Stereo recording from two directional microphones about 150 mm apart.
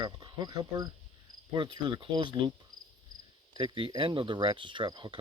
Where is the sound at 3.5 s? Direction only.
35° right (ahead or behind).